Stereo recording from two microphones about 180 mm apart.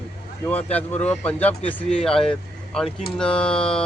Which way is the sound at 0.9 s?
40° left (ahead or behind).